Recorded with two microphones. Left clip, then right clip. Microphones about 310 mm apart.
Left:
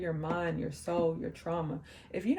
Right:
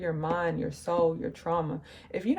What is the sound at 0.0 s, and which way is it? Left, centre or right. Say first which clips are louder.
A woman's voice: right 5 dB; centre.